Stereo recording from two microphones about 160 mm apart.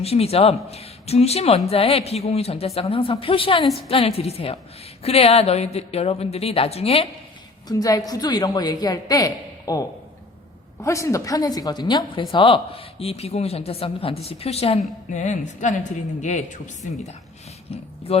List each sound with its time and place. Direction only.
0.0 s a woman's voice: 40° left (ahead or behind)
7.7 s a woman's voice: 25° left (ahead or behind)
10.8 s a woman's voice: 20° left (ahead or behind); by 17.2 s 50° left (ahead or behind)
17.7 s a woman's voice: 40° left (ahead or behind)